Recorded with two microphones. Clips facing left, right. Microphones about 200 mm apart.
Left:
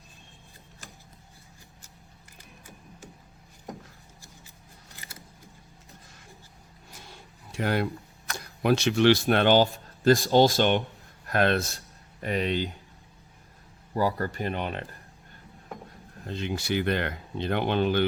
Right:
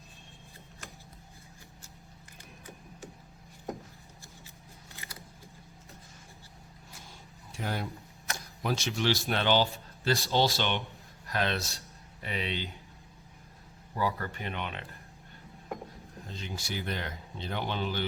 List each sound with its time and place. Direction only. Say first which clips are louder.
7.0 s a sound: left 3 dB; 70° left (ahead or behind)
8.4 s speech: left 9 dB; 65° left (ahead or behind); by 12.7 s 45° left (ahead or behind)
13.9 s speech: left 6 dB; 40° left (ahead or behind)
16.2 s speech: left 10 dB; 65° left (ahead or behind)